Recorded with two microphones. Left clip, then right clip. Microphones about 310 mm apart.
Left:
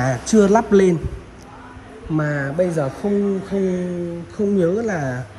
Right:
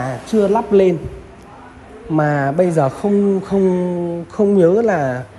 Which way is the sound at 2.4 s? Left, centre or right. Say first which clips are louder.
Right 4 dB; right.